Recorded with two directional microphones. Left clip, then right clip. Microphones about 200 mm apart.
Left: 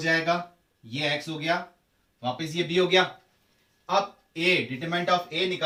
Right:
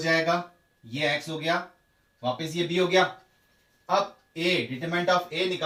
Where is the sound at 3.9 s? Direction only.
15° left (ahead or behind).